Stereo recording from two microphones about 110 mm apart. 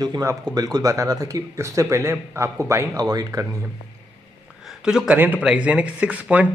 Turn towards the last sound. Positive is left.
turn(degrees=-15)  # may be behind; listen again after turning